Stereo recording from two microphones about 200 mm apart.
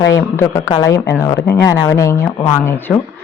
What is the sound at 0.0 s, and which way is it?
Speech, 15° left (ahead or behind).